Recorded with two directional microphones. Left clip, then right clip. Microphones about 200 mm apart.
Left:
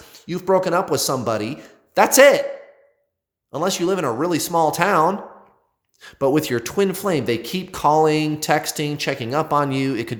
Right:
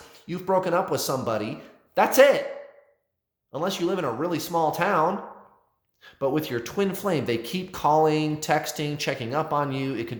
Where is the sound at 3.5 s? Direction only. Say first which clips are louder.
Left 6 dB; 35° left (ahead or behind).